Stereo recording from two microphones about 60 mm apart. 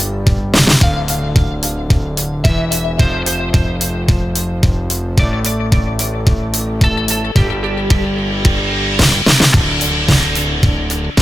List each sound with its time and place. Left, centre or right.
0.5 s music: centre
2.4 s music: centre
6.8 s music: centre
9.0 s music: centre